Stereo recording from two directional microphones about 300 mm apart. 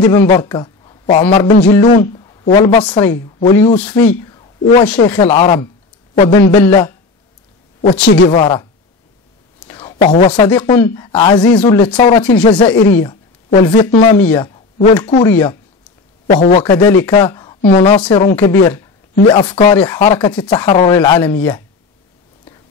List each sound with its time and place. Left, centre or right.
0.0 s a woman's voice: centre
4.0 s a sound: centre
4.8 s a woman's voice: centre
7.8 s a woman's voice: left
9.7 s a woman's voice: centre